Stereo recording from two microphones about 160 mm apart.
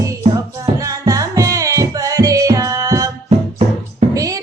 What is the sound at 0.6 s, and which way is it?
Music, 20° right (ahead or behind).